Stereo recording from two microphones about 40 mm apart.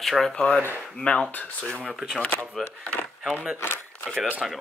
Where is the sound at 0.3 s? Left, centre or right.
Left.